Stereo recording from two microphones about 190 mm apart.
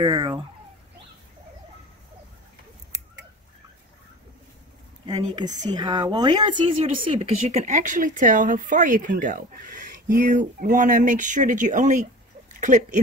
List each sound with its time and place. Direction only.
0.0 s speech: 25° right (ahead or behind)
5.0 s speech: 20° right (ahead or behind); by 13.0 s 40° right (ahead or behind)